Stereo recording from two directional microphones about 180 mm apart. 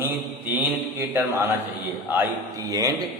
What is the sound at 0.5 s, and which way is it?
Speech, 10° right (ahead or behind).